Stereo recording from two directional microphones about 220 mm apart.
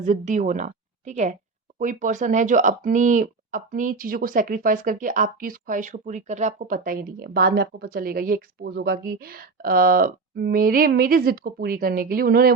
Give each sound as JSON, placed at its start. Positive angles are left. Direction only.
{"t": 0.0, "sound": "a woman's voice", "side_deg": -35}